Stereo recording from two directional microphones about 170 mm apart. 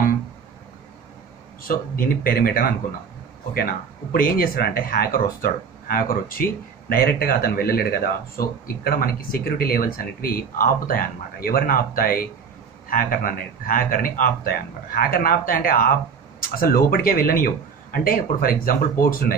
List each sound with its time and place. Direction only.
1.7 s speech: 60° left (ahead or behind)